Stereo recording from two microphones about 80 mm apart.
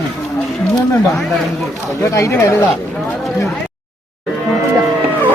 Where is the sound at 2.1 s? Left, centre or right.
Left.